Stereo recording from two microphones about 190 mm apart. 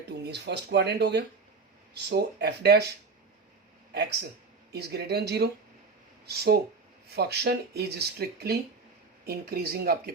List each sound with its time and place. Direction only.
0.1 s speech: 60° right (ahead or behind)
3.9 s speech: 60° right (ahead or behind)